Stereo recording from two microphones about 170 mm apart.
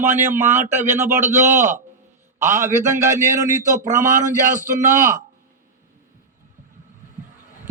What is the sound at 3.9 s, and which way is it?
Speech, 50° right (ahead or behind).